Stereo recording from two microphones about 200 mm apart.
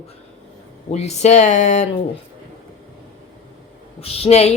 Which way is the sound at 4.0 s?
30° left (ahead or behind).